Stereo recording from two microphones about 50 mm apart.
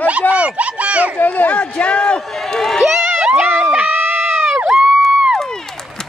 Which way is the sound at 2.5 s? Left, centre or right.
Centre.